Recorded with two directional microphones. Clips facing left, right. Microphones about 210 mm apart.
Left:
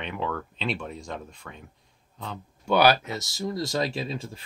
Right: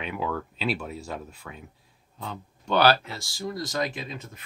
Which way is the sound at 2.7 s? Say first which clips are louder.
Left 1 dB; 15° left (ahead or behind).